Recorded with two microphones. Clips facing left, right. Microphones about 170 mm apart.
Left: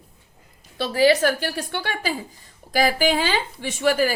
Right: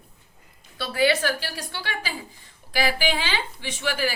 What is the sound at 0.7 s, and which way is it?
Speech, 35° left (ahead or behind).